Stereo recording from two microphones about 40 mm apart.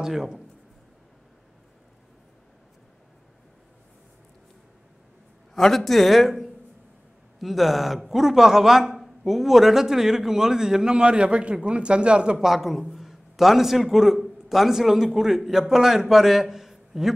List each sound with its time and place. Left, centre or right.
0.0 s a man's voice: centre
5.5 s a man's voice: centre; by 12.4 s right
12.4 s a man's voice: centre